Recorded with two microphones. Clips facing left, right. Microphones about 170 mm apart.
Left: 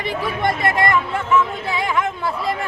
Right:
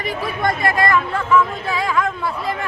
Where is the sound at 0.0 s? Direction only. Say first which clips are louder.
Even; 25° left (ahead or behind).